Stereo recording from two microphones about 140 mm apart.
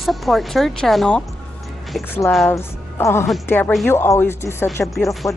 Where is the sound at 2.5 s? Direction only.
20° left (ahead or behind).